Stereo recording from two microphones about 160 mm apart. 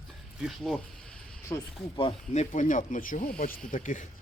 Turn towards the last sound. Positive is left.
turn(degrees=55)  # may be behind; listen again after turning